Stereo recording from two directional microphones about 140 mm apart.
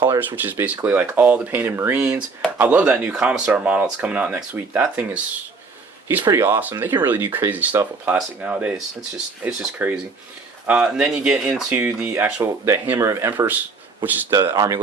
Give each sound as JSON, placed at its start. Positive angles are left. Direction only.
{"t": 0.2, "sound": "speech", "side_deg": -15}
{"t": 6.3, "sound": "speech", "side_deg": -20}
{"t": 14.3, "sound": "speech", "side_deg": -25}